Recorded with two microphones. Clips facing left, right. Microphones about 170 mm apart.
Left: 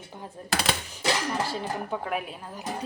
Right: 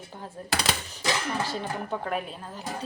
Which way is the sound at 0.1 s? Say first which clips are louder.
Even; 10° left (ahead or behind).